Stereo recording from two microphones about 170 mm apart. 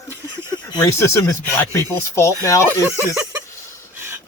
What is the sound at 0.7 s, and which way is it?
Speech, 15° left (ahead or behind).